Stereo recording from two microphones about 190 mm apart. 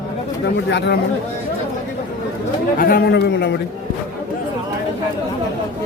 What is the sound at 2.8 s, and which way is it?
Speech, 50° left (ahead or behind).